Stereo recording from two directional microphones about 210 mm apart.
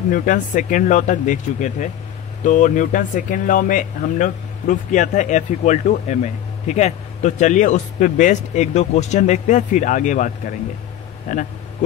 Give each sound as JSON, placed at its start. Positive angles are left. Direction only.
{"t": 0.1, "sound": "speech", "side_deg": 40}